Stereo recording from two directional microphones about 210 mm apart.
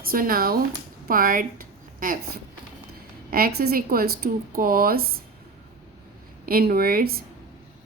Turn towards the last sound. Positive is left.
turn(degrees=-45)  # may be behind; listen again after turning